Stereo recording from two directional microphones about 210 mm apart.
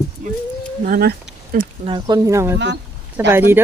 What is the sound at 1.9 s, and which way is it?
Speech, 20° right (ahead or behind).